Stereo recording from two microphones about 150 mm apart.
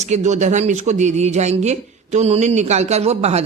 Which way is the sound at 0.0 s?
50° right (ahead or behind).